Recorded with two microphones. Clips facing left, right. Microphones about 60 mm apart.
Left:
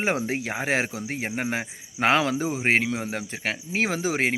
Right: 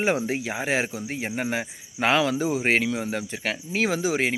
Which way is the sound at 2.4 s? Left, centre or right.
Left.